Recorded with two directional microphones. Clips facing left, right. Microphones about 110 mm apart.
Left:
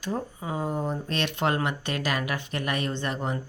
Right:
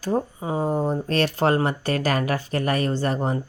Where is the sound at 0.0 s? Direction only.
35° right (ahead or behind).